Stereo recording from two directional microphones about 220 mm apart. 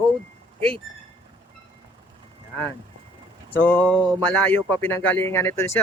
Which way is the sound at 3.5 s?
10° left (ahead or behind).